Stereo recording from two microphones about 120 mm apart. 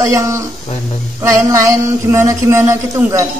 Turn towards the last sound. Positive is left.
turn(degrees=-20)  # may be behind; listen again after turning